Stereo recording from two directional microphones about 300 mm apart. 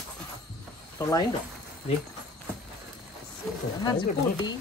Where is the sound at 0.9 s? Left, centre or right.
Centre.